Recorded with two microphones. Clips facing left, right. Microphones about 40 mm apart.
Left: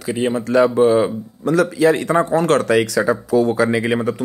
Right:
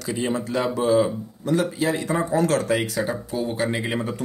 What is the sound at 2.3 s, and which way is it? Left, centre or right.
Speech, left.